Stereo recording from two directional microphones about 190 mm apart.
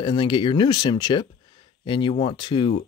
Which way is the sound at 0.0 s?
25° left (ahead or behind).